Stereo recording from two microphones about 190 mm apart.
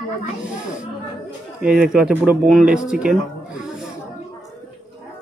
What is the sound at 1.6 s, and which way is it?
Speech, 5° right (ahead or behind).